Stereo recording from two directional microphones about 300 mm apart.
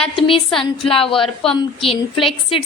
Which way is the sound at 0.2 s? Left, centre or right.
Centre.